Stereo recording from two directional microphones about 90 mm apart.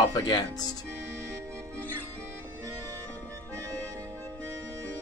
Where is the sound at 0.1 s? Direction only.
50° left (ahead or behind).